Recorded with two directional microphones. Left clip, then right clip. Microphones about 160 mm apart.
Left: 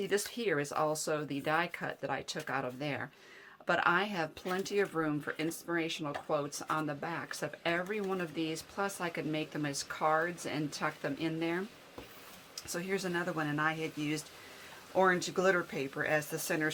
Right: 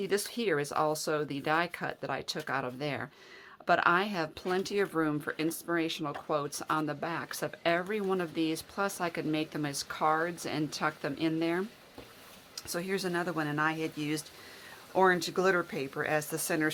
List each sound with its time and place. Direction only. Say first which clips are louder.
0.3 s speech: right 3 dB; 30° right (ahead or behind)